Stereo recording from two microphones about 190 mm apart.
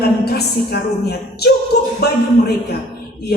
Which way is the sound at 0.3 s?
60° left (ahead or behind).